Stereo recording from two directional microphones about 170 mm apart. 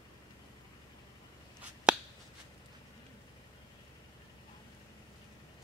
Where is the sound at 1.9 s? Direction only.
5° right (ahead or behind).